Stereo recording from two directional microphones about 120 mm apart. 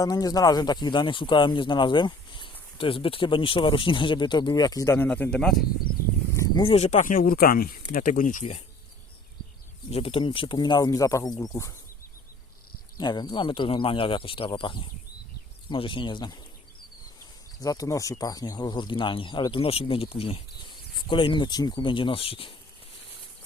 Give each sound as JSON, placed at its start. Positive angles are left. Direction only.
{"t": 0.0, "sound": "speech", "side_deg": 30}
{"t": 5.0, "sound": "speech", "side_deg": 10}
{"t": 6.3, "sound": "a sound", "side_deg": 25}
{"t": 6.6, "sound": "speech", "side_deg": 50}
{"t": 6.8, "sound": "speech", "side_deg": 90}
{"t": 8.2, "sound": "speech", "side_deg": 90}
{"t": 9.9, "sound": "speech", "side_deg": 50}
{"t": 13.0, "sound": "speech", "side_deg": 35}
{"t": 17.6, "sound": "speech", "side_deg": 30}